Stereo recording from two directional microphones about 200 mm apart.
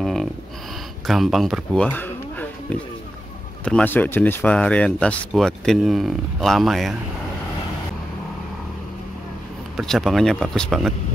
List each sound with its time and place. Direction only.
0.0 s a sound: centre (ahead or behind)
1.0 s speech: centre (ahead or behind)
3.6 s speech: 5° left (ahead or behind)
9.8 s speech: centre (ahead or behind)